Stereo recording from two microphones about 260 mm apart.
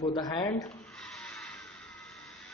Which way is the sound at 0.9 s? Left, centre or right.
Centre.